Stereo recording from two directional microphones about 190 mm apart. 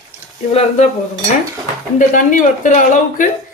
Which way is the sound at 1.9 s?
40° left (ahead or behind).